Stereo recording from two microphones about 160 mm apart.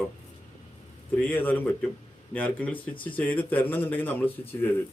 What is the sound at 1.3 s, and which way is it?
Speech, 10° left (ahead or behind).